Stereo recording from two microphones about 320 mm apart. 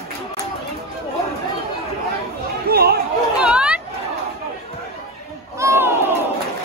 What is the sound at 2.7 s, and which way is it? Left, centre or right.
Chatter, right.